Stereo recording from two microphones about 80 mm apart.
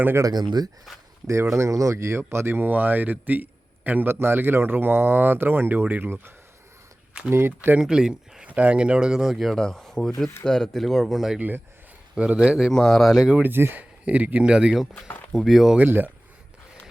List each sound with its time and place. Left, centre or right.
0.2 s speech: right
1.3 s speech: right
7.8 s speech: centre
11.3 s speech: right
12.1 s speech: centre
12.7 s speech: centre
13.4 s speech: right; by 15.8 s centre
15.8 s speech: right